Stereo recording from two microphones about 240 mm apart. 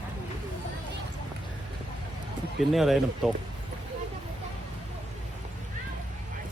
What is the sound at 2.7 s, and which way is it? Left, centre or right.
Speech, centre.